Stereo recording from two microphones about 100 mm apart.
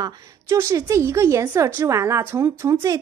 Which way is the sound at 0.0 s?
30° right (ahead or behind).